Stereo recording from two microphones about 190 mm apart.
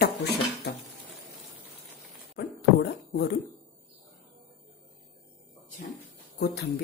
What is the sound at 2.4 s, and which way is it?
Beatboxing, 60° left (ahead or behind).